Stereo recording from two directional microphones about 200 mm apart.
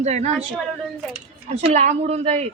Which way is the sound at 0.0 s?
35° right (ahead or behind).